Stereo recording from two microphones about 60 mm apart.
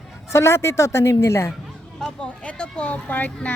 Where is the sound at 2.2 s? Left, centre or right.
Centre.